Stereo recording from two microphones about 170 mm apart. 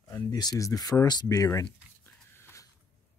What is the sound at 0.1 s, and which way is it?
Speech, 20° left (ahead or behind).